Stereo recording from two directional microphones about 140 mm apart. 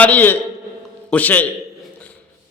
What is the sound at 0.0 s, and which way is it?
A man's voice, 10° left (ahead or behind).